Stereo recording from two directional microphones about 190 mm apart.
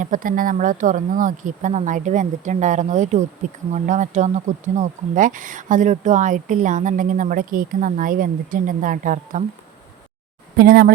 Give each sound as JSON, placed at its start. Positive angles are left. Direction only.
{"t": 0.0, "sound": "speech", "side_deg": -45}
{"t": 10.6, "sound": "speech", "side_deg": -50}